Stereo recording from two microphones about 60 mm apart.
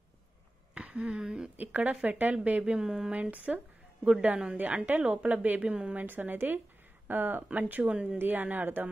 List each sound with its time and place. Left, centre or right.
0.7 s a sound: centre
1.6 s a woman's voice: right; by 3.2 s centre
3.2 s a woman's voice: right
6.0 s a woman's voice: right
8.2 s a woman's voice: right